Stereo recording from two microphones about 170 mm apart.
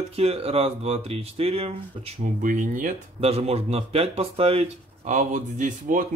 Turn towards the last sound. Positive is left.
turn(degrees=-50)  # may be behind; listen again after turning